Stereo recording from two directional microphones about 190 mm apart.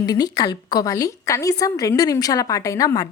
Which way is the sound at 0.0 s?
20° left (ahead or behind).